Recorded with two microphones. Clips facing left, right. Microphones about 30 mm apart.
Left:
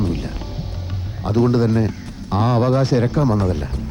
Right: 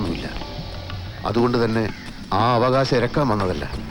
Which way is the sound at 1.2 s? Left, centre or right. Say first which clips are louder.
Left 2 dB; right.